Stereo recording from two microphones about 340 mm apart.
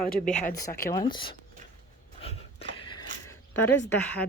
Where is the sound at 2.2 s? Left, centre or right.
Centre.